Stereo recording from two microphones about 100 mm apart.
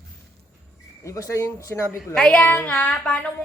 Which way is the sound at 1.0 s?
30° left (ahead or behind).